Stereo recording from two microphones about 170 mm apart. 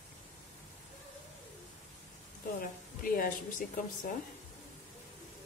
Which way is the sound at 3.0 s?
55° left (ahead or behind).